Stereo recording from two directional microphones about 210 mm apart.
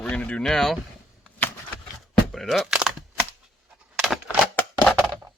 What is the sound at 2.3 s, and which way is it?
Speech, centre (ahead or behind).